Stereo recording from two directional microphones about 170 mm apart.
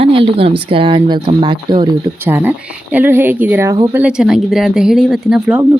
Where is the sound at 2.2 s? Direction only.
10° right (ahead or behind).